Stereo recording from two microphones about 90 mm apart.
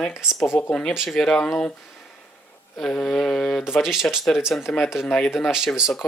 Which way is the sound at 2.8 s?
5° left (ahead or behind).